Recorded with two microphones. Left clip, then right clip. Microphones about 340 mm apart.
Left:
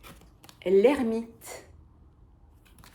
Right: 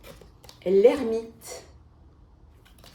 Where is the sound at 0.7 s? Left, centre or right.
Left.